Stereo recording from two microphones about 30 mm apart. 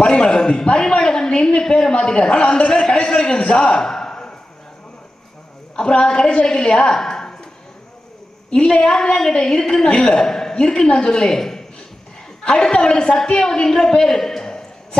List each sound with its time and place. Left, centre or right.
0.0 s a sound: left
1.3 s a man's voice: left
5.8 s a man's voice: left
8.5 s a man's voice: left
9.8 s a man's voice: left
10.1 s a man's voice: centre
10.5 s a man's voice: left
12.4 s a man's voice: left